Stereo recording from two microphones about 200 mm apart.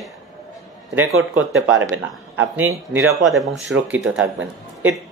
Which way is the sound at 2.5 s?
10° right (ahead or behind).